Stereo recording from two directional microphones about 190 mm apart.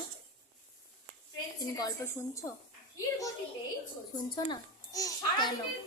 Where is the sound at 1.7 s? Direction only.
15° left (ahead or behind).